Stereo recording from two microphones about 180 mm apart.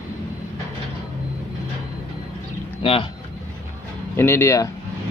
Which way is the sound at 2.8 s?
30° left (ahead or behind).